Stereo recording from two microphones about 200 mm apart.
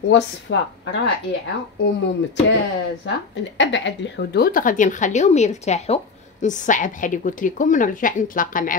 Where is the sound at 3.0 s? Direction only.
60° left (ahead or behind).